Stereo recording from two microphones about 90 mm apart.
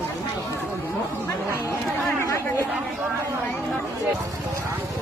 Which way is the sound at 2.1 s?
30° left (ahead or behind).